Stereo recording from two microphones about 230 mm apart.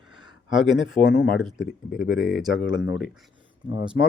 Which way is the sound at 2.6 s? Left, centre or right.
Left.